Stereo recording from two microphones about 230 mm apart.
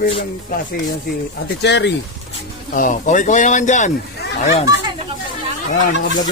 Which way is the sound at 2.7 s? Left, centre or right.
Left.